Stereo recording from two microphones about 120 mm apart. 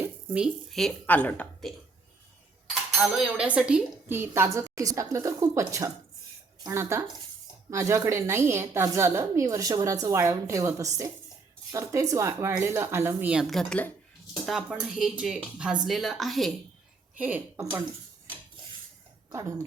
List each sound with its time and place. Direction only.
0.0 s a sound: 10° right (ahead or behind)
0.7 s speech: 5° left (ahead or behind)
3.2 s dishes: 10° right (ahead or behind)
4.1 s a woman's voice: 20° right (ahead or behind); by 13.9 s 10° left (ahead or behind)
14.4 s speech: 5° right (ahead or behind)
17.2 s dishes: 15° right (ahead or behind)
19.3 s speech: 25° right (ahead or behind)